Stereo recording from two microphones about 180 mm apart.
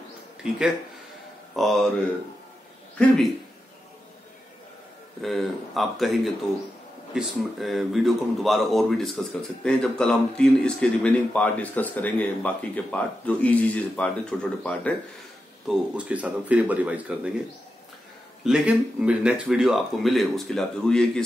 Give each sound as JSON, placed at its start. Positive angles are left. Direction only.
{"t": 1.6, "sound": "speech", "side_deg": 0}
{"t": 5.2, "sound": "speech", "side_deg": 0}
{"t": 15.6, "sound": "speech", "side_deg": -5}
{"t": 18.4, "sound": "speech", "side_deg": -5}